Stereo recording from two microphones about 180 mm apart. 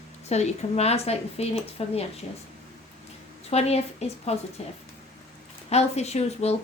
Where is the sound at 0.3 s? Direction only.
40° left (ahead or behind).